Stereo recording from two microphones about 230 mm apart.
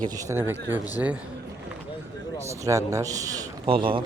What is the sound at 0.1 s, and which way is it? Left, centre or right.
A man's voice, centre.